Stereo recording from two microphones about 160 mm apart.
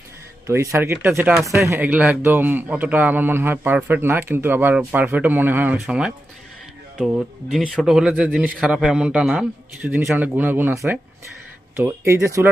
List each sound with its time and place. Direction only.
0.4 s a man's voice: 15° right (ahead or behind)
9.8 s a man's voice: 15° right (ahead or behind)